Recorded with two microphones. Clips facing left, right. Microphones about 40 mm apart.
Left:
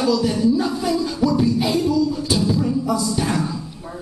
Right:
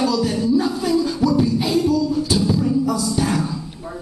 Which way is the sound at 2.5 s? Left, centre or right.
Centre.